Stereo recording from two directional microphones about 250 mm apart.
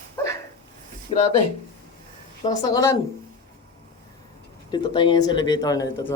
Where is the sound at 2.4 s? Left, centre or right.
Centre.